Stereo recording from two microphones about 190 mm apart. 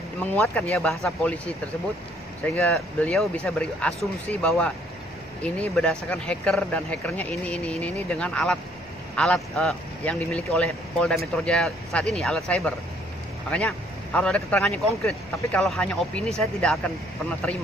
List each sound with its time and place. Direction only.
0.2 s speech: 10° left (ahead or behind)